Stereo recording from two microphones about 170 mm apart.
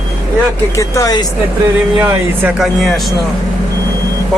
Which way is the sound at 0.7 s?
20° left (ahead or behind).